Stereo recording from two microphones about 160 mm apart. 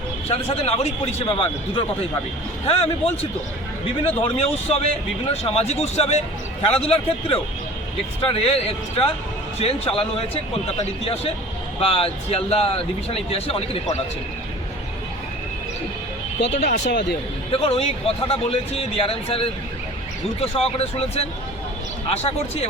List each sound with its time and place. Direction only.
0.3 s speech: 40° left (ahead or behind)
16.5 s speech: 45° left (ahead or behind)
16.8 s speech: 90° left
17.5 s speech: 35° left (ahead or behind)